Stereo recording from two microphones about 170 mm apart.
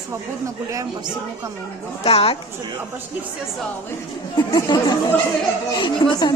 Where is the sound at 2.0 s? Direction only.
35° left (ahead or behind).